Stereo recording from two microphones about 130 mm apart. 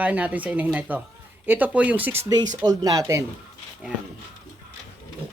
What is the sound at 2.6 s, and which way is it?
Speech, 30° right (ahead or behind).